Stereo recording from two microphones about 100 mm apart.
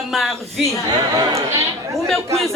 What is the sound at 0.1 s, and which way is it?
Speech, centre (ahead or behind).